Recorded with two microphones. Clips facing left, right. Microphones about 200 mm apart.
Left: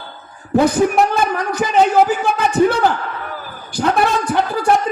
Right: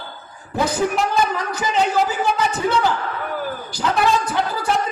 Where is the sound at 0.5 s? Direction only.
60° left (ahead or behind).